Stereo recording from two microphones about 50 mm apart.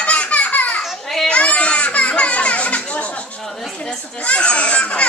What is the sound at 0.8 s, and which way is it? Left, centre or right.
Children playing, centre.